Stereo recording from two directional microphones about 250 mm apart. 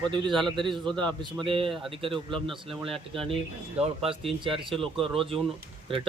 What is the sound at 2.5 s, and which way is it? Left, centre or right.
Speech, centre.